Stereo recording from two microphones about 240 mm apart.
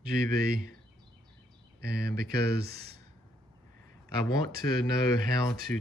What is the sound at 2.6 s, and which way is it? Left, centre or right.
Speech, right.